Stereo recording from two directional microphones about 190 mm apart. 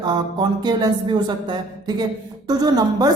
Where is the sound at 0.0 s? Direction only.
25° right (ahead or behind).